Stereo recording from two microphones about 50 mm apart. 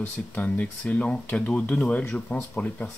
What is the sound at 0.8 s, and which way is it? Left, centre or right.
Speech, left.